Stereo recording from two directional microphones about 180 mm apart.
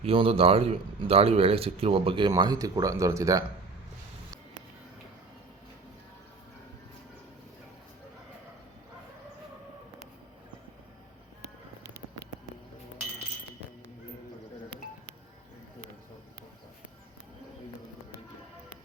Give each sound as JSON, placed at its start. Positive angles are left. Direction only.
{"t": 0.0, "sound": "a man's voice", "side_deg": -30}